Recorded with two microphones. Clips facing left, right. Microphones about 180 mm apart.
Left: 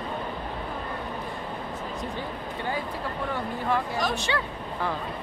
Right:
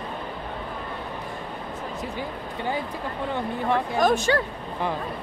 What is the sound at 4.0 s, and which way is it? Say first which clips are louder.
Speech: right 7 dB; 50° right (ahead or behind).